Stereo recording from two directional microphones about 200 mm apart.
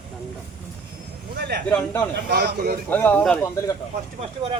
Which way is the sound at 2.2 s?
55° right (ahead or behind).